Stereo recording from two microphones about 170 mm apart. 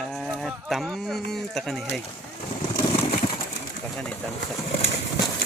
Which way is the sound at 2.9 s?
30° left (ahead or behind).